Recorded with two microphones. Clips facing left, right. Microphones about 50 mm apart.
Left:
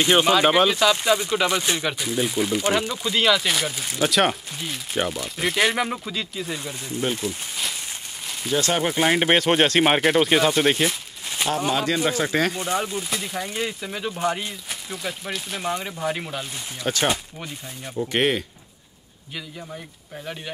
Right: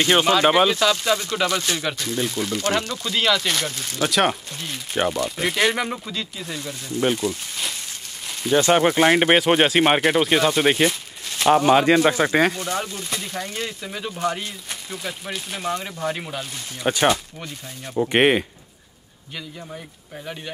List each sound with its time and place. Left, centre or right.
0.0 s speech: centre
4.1 s speech: centre
8.5 s speech: right
8.9 s speech: centre
11.5 s speech: right
12.5 s speech: centre
16.8 s speech: centre
17.1 s speech: centre
17.9 s speech: right